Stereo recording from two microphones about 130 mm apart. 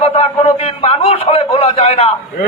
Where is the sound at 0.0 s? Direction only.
50° left (ahead or behind).